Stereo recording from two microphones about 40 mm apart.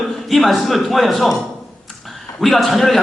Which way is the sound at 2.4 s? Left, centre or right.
Centre.